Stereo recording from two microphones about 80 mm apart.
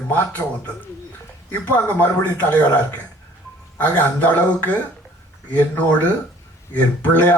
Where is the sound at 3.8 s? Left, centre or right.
Left.